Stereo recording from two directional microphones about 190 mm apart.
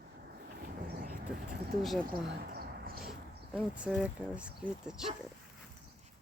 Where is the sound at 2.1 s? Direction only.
50° right (ahead or behind).